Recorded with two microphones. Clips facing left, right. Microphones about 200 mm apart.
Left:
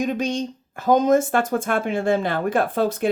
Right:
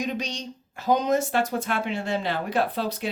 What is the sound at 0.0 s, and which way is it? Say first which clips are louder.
Speech: left 7 dB; 50° left (ahead or behind).